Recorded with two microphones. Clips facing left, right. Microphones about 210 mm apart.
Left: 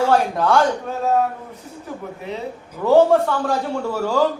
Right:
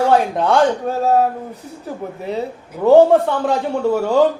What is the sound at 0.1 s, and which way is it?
Speech, 20° right (ahead or behind).